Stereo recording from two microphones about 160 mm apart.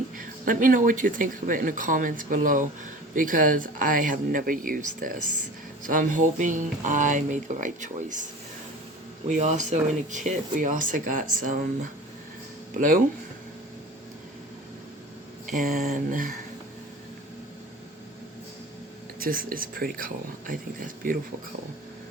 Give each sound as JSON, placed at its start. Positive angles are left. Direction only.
{"t": 0.2, "sound": "speech", "side_deg": -60}
{"t": 15.4, "sound": "speech", "side_deg": -55}
{"t": 19.2, "sound": "speech", "side_deg": -65}